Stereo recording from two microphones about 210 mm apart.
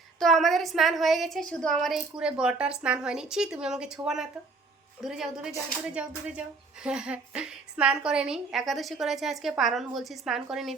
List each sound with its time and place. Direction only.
0.2 s a woman's voice: centre (ahead or behind)